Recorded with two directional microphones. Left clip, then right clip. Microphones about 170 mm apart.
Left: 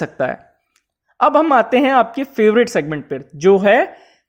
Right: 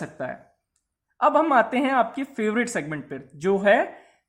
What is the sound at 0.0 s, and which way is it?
Speech, 40° left (ahead or behind).